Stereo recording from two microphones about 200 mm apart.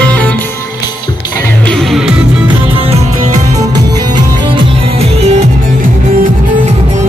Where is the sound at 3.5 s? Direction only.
20° right (ahead or behind).